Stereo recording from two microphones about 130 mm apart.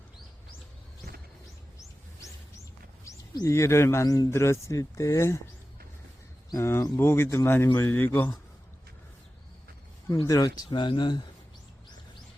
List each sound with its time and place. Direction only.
3.0 s speech: 25° left (ahead or behind)
6.5 s speech: 20° left (ahead or behind)
10.2 s speech: 30° left (ahead or behind)